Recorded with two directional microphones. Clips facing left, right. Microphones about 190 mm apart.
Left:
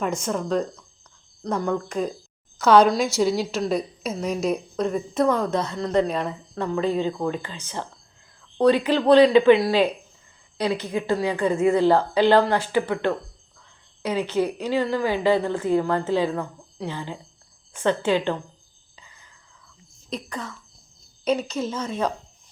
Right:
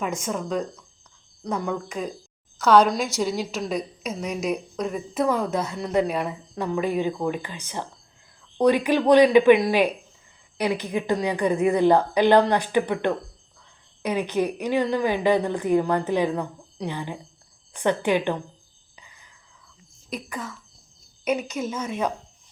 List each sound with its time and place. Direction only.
0.0 s a woman's voice: centre (ahead or behind)
18.9 s whispering: 15° right (ahead or behind)
20.1 s a woman's voice: 5° right (ahead or behind)